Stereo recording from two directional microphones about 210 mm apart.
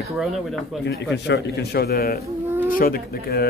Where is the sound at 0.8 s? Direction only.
55° left (ahead or behind).